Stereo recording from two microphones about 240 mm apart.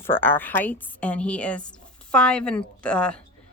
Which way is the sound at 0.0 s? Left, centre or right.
Centre.